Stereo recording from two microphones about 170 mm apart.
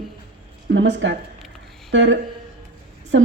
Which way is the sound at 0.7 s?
90° right.